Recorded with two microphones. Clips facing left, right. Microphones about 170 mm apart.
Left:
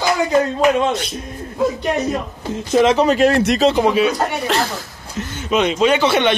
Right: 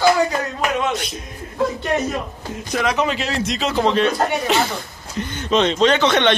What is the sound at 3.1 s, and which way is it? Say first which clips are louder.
Speech: left 9 dB; 55° left (ahead or behind).